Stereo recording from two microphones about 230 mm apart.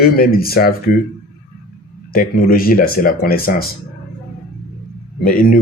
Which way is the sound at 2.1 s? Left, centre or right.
Left.